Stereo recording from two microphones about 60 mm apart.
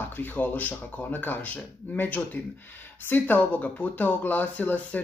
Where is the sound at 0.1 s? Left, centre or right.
Left.